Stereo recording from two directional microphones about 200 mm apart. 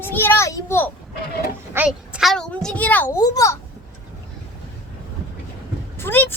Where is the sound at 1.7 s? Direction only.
5° right (ahead or behind); by 3.6 s 15° left (ahead or behind).